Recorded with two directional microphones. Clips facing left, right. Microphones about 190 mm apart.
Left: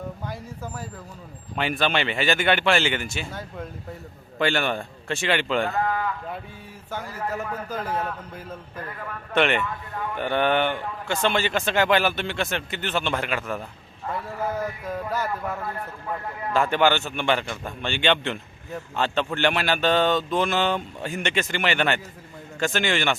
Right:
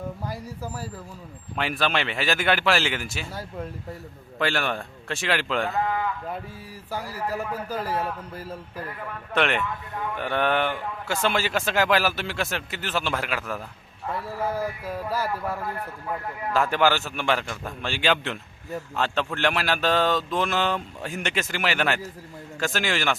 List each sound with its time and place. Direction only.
0.3 s a man's voice: 5° right (ahead or behind)
6.9 s a man's voice: 35° right (ahead or behind)
7.3 s a man's voice: 10° right (ahead or behind)
16.0 s a man's voice: 5° right (ahead or behind)